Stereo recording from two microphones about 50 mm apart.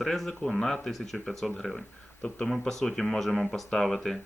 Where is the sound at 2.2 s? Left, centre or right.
Centre.